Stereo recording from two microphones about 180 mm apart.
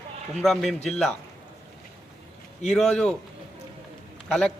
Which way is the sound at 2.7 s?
5° left (ahead or behind).